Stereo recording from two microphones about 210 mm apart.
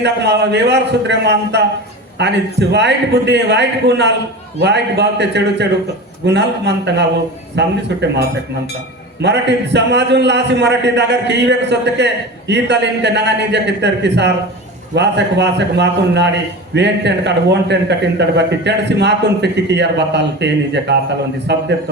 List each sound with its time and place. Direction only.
0.0 s a man's voice: 55° right (ahead or behind)
9.2 s a man's voice: 55° right (ahead or behind)